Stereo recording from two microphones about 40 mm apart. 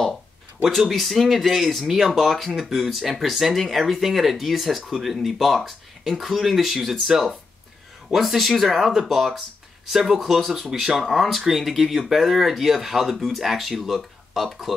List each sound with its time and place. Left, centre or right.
0.7 s speech: centre